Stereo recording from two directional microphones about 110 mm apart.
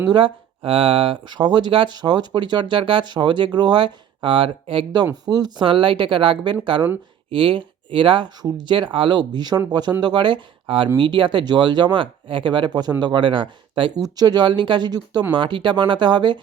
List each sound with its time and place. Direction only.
0.0 s speech: 45° right (ahead or behind)
5.2 s speech: 40° right (ahead or behind)
5.6 s speech: 50° right (ahead or behind)
14.0 s speech: 35° right (ahead or behind)